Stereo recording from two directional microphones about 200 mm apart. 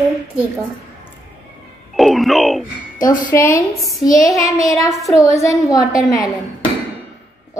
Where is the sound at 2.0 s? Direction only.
Centre (ahead or behind).